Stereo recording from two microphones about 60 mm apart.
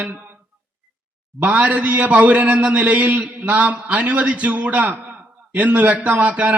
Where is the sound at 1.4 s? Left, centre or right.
Right.